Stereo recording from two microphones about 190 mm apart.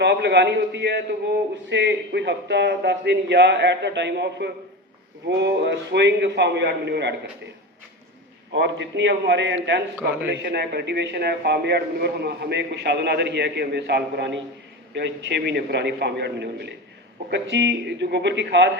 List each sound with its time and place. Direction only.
0.0 s a man's voice: 60° right (ahead or behind)
8.5 s a man's voice: 70° right (ahead or behind)